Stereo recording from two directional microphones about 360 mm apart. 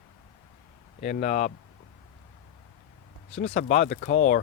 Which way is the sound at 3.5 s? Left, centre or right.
Left.